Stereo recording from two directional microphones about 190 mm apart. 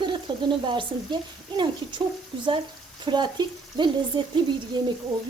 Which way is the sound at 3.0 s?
25° right (ahead or behind).